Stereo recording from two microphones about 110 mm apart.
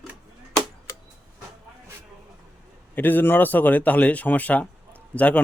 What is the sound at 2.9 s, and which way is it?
Speech, 15° left (ahead or behind).